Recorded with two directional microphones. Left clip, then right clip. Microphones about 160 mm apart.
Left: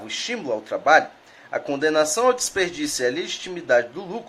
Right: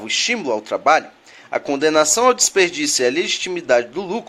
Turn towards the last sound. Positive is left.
turn(degrees=-25)  # may be behind; listen again after turning